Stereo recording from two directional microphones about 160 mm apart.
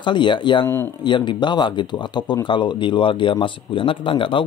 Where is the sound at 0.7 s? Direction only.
15° left (ahead or behind).